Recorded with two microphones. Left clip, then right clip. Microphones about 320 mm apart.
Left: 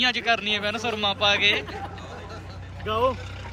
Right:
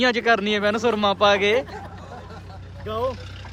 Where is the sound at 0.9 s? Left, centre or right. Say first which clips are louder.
Right 3 dB; right.